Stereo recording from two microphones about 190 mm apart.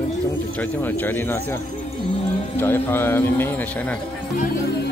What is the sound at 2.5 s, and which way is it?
Speech, 10° left (ahead or behind).